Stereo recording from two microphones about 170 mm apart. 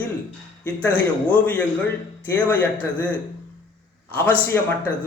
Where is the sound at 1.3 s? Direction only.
10° left (ahead or behind).